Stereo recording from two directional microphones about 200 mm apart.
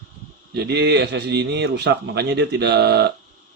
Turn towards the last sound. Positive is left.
turn(degrees=-55)  # may be behind; listen again after turning